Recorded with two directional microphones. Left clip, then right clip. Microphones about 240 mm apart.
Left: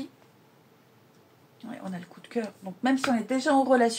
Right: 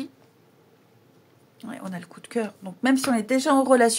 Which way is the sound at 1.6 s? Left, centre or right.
Right.